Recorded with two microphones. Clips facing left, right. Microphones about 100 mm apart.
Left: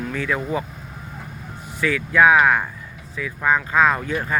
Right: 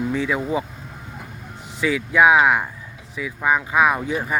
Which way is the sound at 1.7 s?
20° right (ahead or behind).